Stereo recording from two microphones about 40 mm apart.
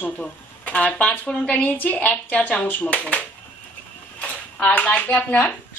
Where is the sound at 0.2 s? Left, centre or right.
Left.